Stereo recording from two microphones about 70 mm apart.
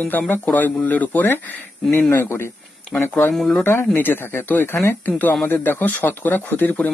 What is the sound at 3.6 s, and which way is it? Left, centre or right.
A man's voice, left.